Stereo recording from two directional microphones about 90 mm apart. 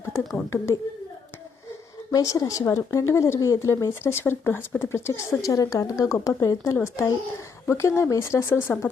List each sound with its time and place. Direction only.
0.1 s speech: 25° left (ahead or behind)
2.1 s speech: 40° left (ahead or behind)